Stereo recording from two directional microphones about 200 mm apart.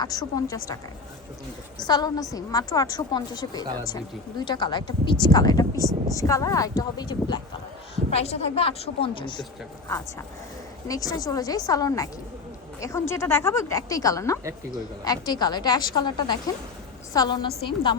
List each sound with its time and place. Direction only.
0.0 s a woman's voice: 20° left (ahead or behind)
1.8 s a woman's voice: 20° left (ahead or behind)
5.7 s speech: 15° right (ahead or behind)
6.1 s a woman's voice: 15° left (ahead or behind)
10.8 s a woman's voice: 15° left (ahead or behind)